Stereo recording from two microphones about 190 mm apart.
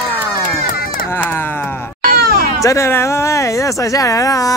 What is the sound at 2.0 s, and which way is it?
Cat, 55° right (ahead or behind).